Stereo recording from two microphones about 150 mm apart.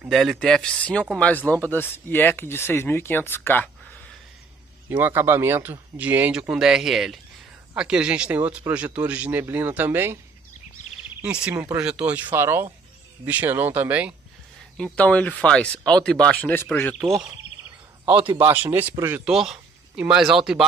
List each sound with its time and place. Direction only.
0.0 s speech: centre (ahead or behind)
4.8 s speech: 15° right (ahead or behind)
11.2 s speech: 5° right (ahead or behind)
14.8 s speech: 10° left (ahead or behind)
16.8 s speech: centre (ahead or behind)
18.0 s a man's voice: 35° right (ahead or behind)
18.4 s speech: 15° right (ahead or behind)